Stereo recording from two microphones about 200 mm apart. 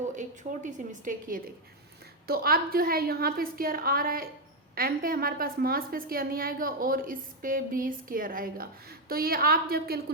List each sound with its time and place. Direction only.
0.2 s a woman's voice: 40° right (ahead or behind)